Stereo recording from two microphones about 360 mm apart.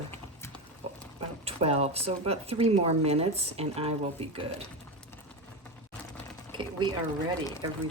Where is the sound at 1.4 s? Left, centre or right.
Centre.